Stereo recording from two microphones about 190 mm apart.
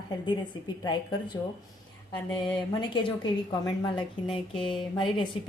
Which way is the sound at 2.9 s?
25° left (ahead or behind).